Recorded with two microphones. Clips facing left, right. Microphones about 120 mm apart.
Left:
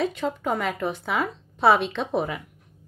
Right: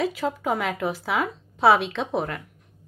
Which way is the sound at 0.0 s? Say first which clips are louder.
Even; 5° right (ahead or behind).